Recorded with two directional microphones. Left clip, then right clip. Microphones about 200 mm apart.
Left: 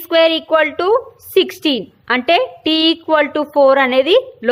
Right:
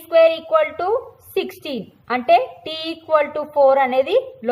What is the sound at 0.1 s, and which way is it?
A woman's voice, 40° left (ahead or behind).